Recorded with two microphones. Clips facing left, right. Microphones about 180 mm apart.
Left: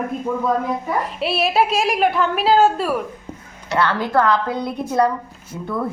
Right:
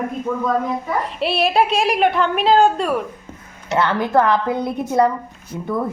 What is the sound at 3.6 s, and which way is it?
A woman's voice, 20° right (ahead or behind).